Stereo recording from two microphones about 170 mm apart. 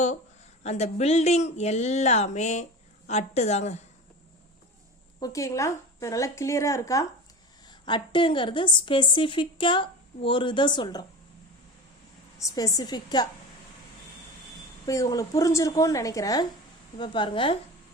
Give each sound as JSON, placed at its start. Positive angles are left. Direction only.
{"t": 0.6, "sound": "speech", "side_deg": 40}
{"t": 5.2, "sound": "a woman's voice", "side_deg": 20}
{"t": 12.4, "sound": "a woman's voice", "side_deg": 20}
{"t": 14.8, "sound": "a woman's voice", "side_deg": 20}